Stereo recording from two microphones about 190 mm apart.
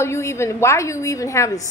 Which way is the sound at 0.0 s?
15° left (ahead or behind).